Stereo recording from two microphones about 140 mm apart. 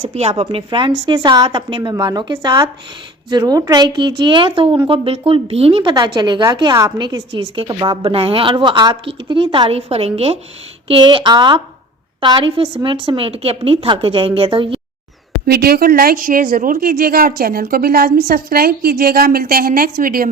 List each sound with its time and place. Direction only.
0.0 s speech: 50° right (ahead or behind)
0.4 s a woman's voice: 35° right (ahead or behind)
5.9 s a woman's voice: 30° right (ahead or behind)
15.6 s a woman's voice: 90° right